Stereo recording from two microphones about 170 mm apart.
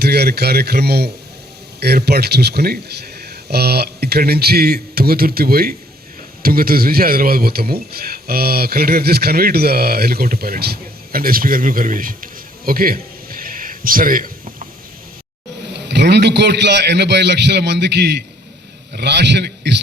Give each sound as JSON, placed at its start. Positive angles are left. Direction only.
{"t": 0.0, "sound": "a man's voice", "side_deg": -70}
{"t": 15.7, "sound": "a man's voice", "side_deg": -80}